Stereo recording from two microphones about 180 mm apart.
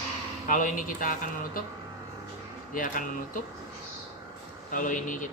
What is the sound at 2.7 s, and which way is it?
Speech, 50° left (ahead or behind).